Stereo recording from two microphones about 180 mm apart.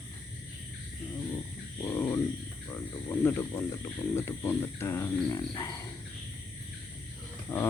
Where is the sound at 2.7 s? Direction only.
10° left (ahead or behind).